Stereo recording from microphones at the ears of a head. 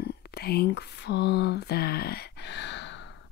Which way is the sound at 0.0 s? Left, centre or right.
Left.